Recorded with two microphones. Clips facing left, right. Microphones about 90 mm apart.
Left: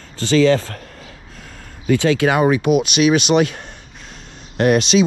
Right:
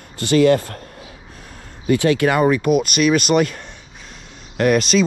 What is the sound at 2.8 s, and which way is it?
Speech, 45° right (ahead or behind).